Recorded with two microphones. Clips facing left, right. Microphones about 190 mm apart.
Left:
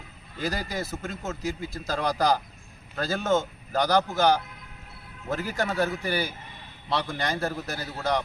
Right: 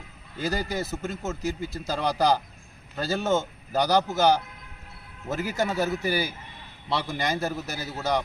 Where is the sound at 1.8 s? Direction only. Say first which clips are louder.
Right 1 dB; 15° right (ahead or behind).